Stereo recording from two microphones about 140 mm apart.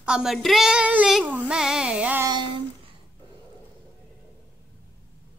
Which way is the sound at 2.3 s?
30° right (ahead or behind).